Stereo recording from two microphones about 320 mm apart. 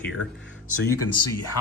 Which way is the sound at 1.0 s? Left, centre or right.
Left.